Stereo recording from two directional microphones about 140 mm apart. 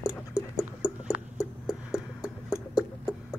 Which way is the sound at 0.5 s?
5° right (ahead or behind).